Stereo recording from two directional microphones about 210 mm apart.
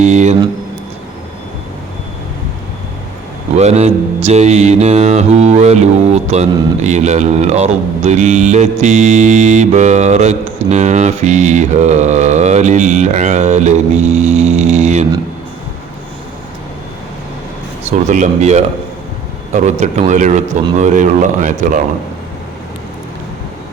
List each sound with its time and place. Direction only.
0.0 s mantra: 35° right (ahead or behind)
3.5 s mantra: 30° right (ahead or behind)
17.8 s mantra: 35° right (ahead or behind)